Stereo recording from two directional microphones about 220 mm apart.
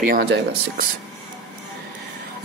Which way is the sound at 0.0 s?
40° right (ahead or behind).